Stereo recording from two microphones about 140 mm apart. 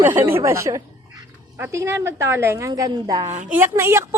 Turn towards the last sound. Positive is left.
turn(degrees=-20)  # may be behind; listen again after turning